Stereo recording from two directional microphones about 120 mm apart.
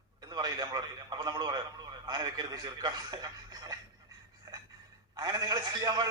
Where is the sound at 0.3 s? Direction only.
35° right (ahead or behind).